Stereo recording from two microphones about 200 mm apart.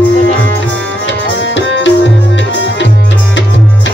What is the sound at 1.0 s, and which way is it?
Tabla, 65° left (ahead or behind).